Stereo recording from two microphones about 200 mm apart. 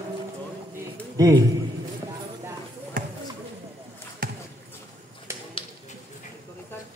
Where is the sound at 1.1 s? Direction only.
15° right (ahead or behind).